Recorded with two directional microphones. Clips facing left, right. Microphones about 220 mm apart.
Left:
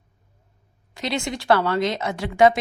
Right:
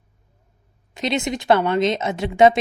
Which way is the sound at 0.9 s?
20° right (ahead or behind).